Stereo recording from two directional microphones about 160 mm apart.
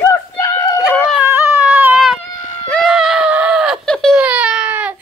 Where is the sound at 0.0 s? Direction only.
15° left (ahead or behind).